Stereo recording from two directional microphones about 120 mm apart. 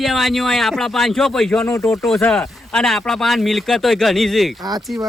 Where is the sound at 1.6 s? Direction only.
25° left (ahead or behind).